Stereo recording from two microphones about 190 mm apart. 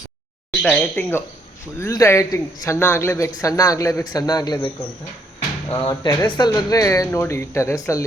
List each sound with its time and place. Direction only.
0.6 s a man's voice: 5° left (ahead or behind)
5.8 s a man's voice: 20° left (ahead or behind)